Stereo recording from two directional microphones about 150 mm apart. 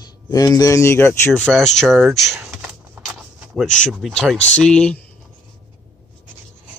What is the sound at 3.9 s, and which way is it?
Speech, centre (ahead or behind).